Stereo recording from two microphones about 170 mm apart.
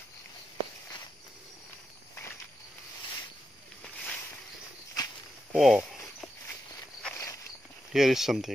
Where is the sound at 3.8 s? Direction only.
5° left (ahead or behind).